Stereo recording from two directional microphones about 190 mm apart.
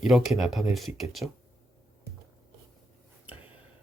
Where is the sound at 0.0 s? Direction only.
Centre (ahead or behind).